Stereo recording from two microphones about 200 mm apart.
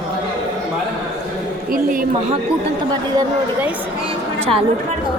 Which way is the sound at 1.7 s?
45° right (ahead or behind).